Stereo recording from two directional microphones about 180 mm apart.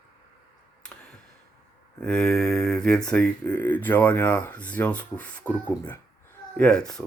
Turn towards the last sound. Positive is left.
turn(degrees=5)  # may be behind; listen again after turning